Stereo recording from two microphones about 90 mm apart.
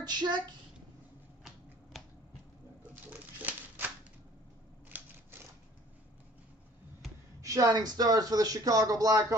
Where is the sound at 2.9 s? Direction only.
20° right (ahead or behind).